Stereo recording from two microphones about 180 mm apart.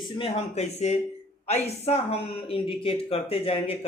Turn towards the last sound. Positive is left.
turn(degrees=35)  # may be behind; listen again after turning